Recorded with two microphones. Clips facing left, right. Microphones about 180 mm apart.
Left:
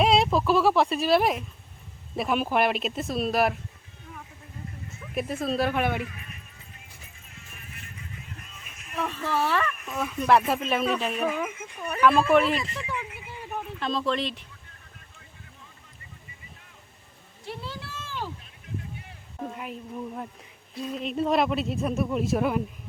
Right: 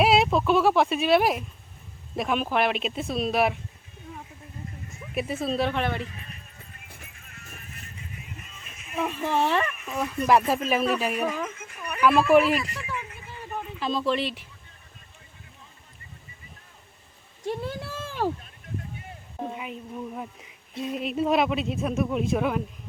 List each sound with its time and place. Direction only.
0.0 s speech: 5° right (ahead or behind)
5.1 s speech: 5° right (ahead or behind)
6.0 s speech: 30° right (ahead or behind)
6.8 s music: 60° right (ahead or behind)
7.5 s music: 40° right (ahead or behind)
8.4 s a sound: centre (ahead or behind)
9.0 s speech: 15° right (ahead or behind)
9.7 s speech: centre (ahead or behind)
12.3 s speech: 5° right (ahead or behind)
12.5 s a sound: 25° left (ahead or behind)
13.6 s speech: centre (ahead or behind)
17.4 s speech: 50° right (ahead or behind)
19.5 s speech: centre (ahead or behind)